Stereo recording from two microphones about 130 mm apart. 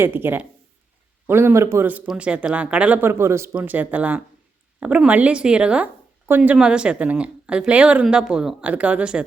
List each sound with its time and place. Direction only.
0.0 s a woman's voice: 15° right (ahead or behind)